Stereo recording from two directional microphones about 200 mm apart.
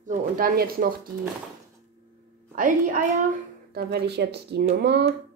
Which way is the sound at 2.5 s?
40° right (ahead or behind).